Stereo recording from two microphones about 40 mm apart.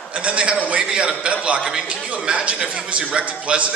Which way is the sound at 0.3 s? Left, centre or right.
Right.